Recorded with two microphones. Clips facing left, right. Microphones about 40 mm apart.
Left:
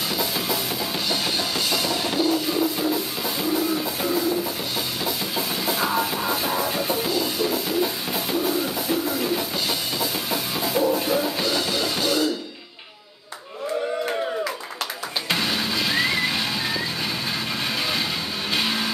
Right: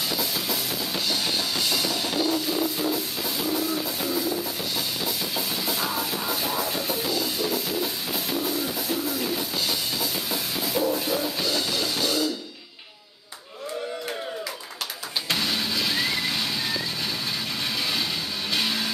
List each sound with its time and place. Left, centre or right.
1.7 s music: centre
15.2 s music: centre
18.5 s music: centre